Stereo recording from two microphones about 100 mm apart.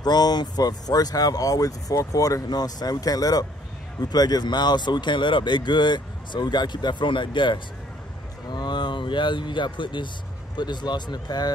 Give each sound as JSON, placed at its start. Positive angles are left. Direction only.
{"t": 0.0, "sound": "speech", "side_deg": 45}